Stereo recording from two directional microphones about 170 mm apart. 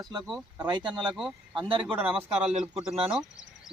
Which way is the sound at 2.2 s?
5° right (ahead or behind).